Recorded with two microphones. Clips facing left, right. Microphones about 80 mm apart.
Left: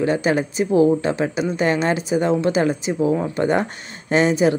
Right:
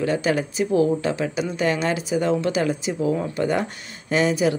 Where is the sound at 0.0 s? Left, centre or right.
Left.